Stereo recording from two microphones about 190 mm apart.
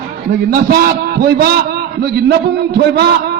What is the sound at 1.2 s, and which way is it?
A man's voice, 55° right (ahead or behind).